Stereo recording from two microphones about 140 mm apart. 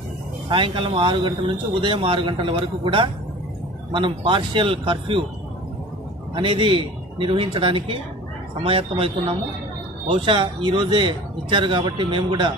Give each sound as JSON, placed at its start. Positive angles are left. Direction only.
{"t": 0.5, "sound": "speech", "side_deg": -35}
{"t": 6.3, "sound": "speech", "side_deg": -40}